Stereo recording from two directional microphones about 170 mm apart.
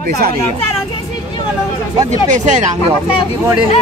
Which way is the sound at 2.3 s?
45° right (ahead or behind).